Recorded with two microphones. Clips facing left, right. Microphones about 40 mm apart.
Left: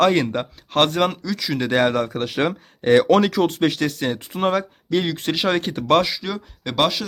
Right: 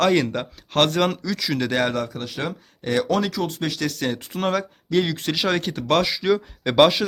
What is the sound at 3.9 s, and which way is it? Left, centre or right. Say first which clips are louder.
Speech: left 1 dB; centre.